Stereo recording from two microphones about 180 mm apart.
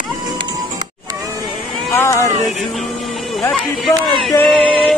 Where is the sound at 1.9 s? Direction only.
15° left (ahead or behind).